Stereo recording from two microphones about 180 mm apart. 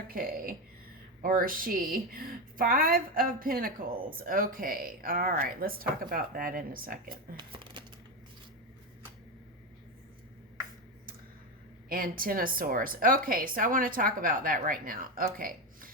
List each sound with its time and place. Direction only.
0.1 s a woman's voice: 55° right (ahead or behind)
7.3 s a sound: 25° right (ahead or behind)
11.9 s a woman's voice: 50° right (ahead or behind)